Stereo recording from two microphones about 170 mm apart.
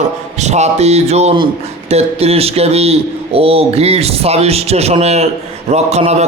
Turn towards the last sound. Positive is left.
turn(degrees=-40)  # may be behind; listen again after turning